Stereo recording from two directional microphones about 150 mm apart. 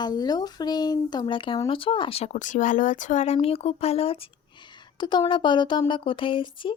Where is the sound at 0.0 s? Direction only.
25° left (ahead or behind).